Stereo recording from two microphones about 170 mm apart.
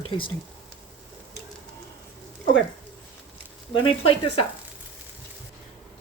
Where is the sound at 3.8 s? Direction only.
35° left (ahead or behind).